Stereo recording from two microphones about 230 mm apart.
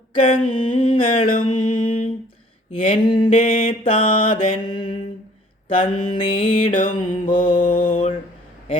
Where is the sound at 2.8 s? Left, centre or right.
Centre.